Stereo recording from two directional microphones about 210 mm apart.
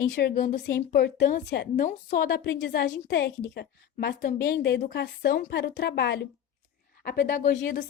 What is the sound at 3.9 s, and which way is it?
Speech, 40° left (ahead or behind).